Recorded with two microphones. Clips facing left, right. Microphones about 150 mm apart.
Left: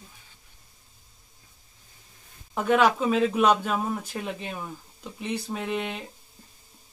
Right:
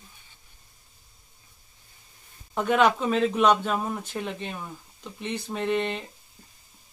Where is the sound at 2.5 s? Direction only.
5° left (ahead or behind).